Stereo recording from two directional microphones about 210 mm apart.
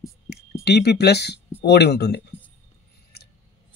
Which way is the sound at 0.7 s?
50° left (ahead or behind).